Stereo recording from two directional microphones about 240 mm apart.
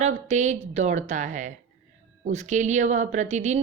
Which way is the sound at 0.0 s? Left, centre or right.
Right.